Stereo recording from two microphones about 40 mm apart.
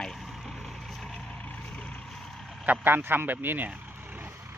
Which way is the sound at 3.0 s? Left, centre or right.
Right.